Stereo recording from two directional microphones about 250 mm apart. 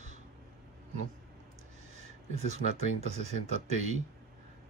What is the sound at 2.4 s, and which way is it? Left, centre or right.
Speech, right.